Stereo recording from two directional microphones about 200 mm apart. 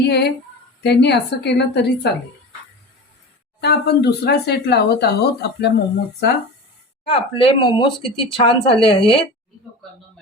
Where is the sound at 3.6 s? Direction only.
55° left (ahead or behind).